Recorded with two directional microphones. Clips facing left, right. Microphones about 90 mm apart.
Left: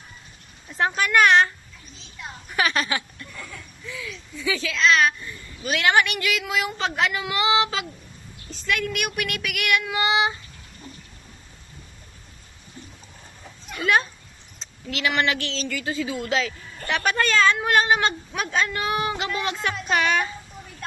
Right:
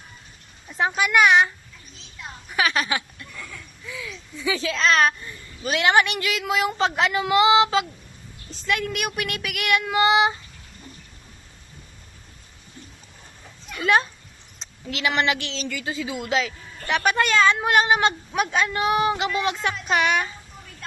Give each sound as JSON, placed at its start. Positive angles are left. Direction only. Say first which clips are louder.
{"t": 0.7, "sound": "speech", "louder": "even", "side_deg": -5}
{"t": 2.1, "sound": "a sound", "louder": "even", "side_deg": 0}
{"t": 3.8, "sound": "speech", "louder": "even", "side_deg": -15}
{"t": 4.7, "sound": "speech", "louder": "left 1 dB", "side_deg": -40}
{"t": 5.3, "sound": "a woman's voice", "louder": "right 1 dB", "side_deg": -30}
{"t": 14.6, "sound": "a woman's voice", "louder": "even", "side_deg": -25}